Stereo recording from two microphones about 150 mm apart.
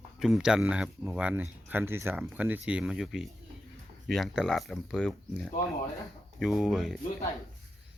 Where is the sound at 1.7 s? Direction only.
15° right (ahead or behind).